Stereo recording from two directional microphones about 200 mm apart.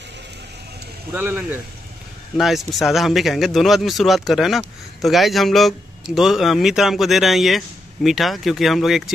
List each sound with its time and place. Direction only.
1.1 s speech: 10° right (ahead or behind)